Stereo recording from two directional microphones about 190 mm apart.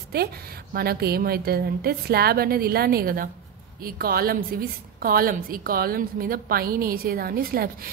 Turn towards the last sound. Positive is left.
turn(degrees=-50)  # may be behind; listen again after turning